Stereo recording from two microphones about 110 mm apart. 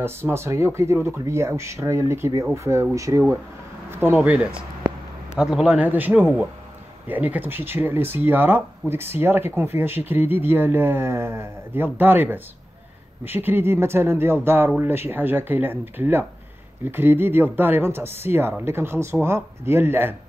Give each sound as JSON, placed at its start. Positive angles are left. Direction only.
{"t": 0.0, "sound": "speech", "side_deg": -20}